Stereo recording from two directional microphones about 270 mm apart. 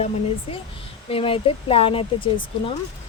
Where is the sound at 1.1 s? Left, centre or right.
Centre.